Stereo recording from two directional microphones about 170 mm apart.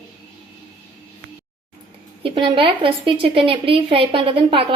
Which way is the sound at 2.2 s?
30° right (ahead or behind).